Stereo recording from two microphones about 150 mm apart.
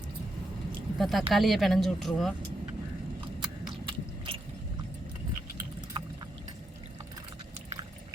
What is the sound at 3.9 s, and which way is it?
Biting, 35° right (ahead or behind).